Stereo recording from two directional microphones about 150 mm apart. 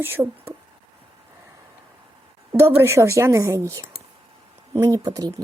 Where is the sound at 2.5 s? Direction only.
15° right (ahead or behind).